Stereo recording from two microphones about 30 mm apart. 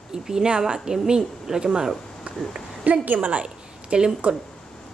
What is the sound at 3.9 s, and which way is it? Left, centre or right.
Speech, right.